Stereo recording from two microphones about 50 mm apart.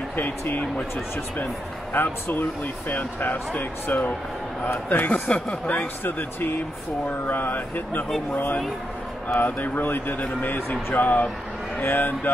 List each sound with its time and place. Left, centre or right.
0.1 s speech: left
2.0 s speech: left
9.4 s speech: left